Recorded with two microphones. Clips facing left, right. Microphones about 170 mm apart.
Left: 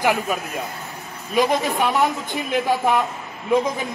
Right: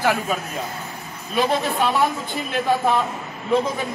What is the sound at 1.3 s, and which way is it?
A man's voice, 15° left (ahead or behind).